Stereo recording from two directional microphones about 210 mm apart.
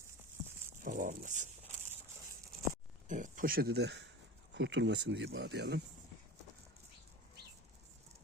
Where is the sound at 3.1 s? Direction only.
35° right (ahead or behind); by 5.8 s 55° right (ahead or behind).